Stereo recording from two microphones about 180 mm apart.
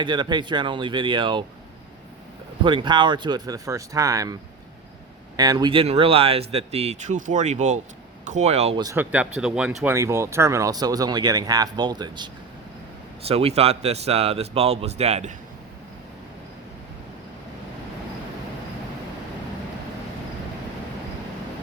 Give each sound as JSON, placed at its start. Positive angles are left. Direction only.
{"t": 0.0, "sound": "speech", "side_deg": -25}
{"t": 2.6, "sound": "speech", "side_deg": -25}
{"t": 5.4, "sound": "speech", "side_deg": -20}
{"t": 8.8, "sound": "speech", "side_deg": -15}